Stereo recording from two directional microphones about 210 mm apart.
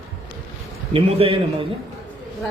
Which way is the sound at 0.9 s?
25° right (ahead or behind).